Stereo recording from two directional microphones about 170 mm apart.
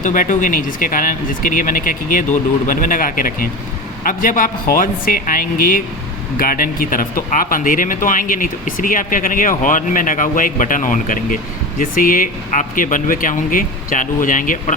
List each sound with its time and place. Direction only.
0.0 s speech: 50° left (ahead or behind)